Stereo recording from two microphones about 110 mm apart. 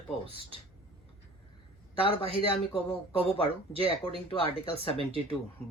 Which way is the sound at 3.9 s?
60° left (ahead or behind).